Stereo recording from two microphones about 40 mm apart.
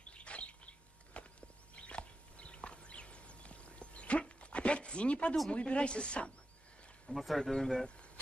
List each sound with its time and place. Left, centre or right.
0.1 s bird: left
1.8 s a sound: left
5.5 s speech: left
7.1 s speech: centre
7.5 s speech: centre